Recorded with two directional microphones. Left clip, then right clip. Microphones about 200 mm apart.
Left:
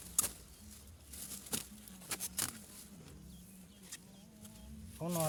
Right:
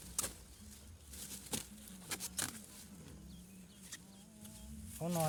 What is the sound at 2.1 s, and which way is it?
Patter, 25° left (ahead or behind).